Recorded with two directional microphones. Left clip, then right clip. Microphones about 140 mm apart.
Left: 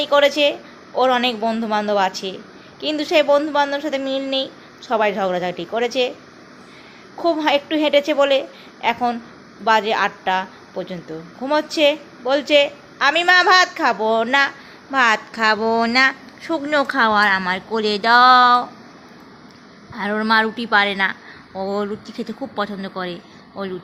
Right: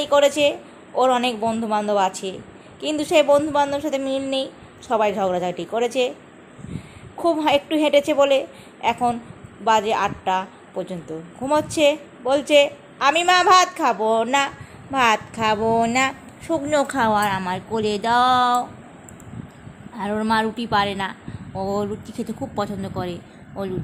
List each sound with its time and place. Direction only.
0.0 s a woman's voice: 20° right (ahead or behind)
7.2 s a woman's voice: 20° right (ahead or behind); by 18.6 s 5° right (ahead or behind)
20.0 s a woman's voice: 5° right (ahead or behind)